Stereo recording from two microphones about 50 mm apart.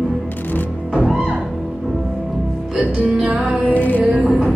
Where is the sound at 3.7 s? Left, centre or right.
Left.